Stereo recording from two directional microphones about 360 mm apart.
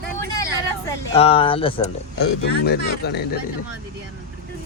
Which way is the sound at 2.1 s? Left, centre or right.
Left.